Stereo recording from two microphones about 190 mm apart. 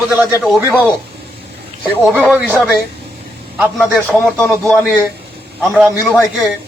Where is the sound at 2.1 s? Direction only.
10° right (ahead or behind).